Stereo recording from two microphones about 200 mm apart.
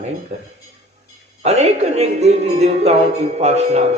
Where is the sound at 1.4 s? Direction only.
30° right (ahead or behind).